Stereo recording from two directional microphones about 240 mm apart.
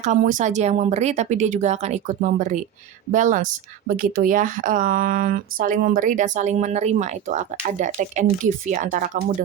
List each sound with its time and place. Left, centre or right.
0.0 s speech: right